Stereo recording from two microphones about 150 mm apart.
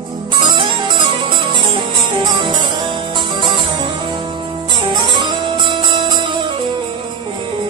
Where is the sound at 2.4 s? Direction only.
30° right (ahead or behind).